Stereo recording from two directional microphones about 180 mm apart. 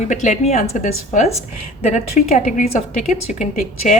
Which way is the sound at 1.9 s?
40° left (ahead or behind).